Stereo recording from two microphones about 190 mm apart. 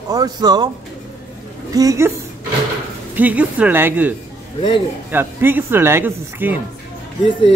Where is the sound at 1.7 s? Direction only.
15° right (ahead or behind).